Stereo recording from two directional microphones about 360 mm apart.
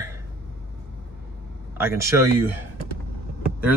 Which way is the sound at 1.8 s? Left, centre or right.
Centre.